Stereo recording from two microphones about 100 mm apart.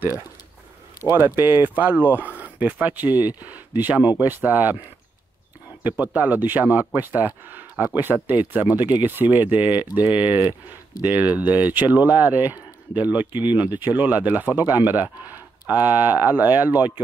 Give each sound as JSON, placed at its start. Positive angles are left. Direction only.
{"t": 1.0, "sound": "speech", "side_deg": -25}
{"t": 5.9, "sound": "speech", "side_deg": -15}